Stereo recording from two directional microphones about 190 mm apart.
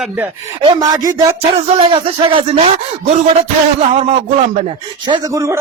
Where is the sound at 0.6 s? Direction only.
20° right (ahead or behind).